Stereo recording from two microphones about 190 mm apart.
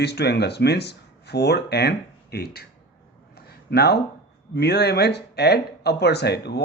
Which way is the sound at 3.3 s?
60° left (ahead or behind).